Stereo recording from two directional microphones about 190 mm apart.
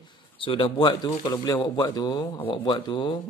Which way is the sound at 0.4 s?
25° left (ahead or behind).